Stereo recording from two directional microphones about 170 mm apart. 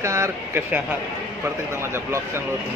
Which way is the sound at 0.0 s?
15° right (ahead or behind).